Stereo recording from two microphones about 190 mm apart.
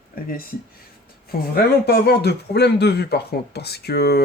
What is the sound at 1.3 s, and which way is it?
Speech, 55° left (ahead or behind).